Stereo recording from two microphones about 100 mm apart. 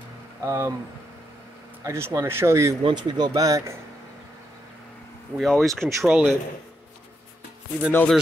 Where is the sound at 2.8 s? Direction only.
45° right (ahead or behind).